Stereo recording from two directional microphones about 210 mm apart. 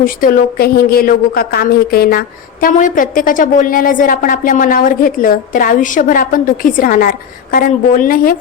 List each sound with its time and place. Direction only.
0.0 s speech: 40° left (ahead or behind)